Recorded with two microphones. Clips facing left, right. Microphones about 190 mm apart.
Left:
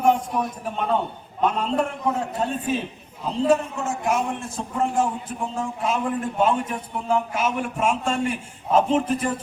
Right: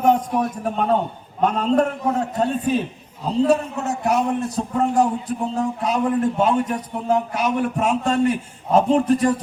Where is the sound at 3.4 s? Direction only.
40° right (ahead or behind).